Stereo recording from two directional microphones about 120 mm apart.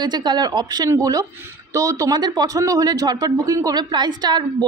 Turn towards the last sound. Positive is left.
turn(degrees=-35)  # may be behind; listen again after turning